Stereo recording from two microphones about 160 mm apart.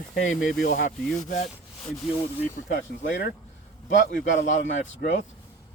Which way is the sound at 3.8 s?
55° left (ahead or behind).